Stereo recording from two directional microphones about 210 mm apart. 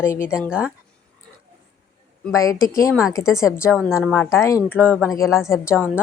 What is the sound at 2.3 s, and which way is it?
Speech, 15° left (ahead or behind).